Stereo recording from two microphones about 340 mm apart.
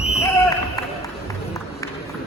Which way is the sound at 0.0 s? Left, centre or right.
Centre.